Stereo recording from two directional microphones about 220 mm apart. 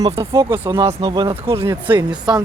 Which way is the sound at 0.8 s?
25° right (ahead or behind).